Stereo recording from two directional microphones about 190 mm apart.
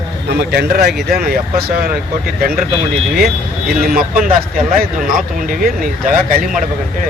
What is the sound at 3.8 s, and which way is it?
Speech, 50° right (ahead or behind).